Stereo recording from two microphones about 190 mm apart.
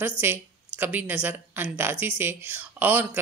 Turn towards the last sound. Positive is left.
turn(degrees=-10)  # may be behind; listen again after turning